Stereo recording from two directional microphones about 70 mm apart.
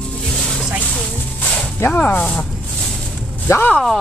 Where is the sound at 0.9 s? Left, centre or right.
Centre.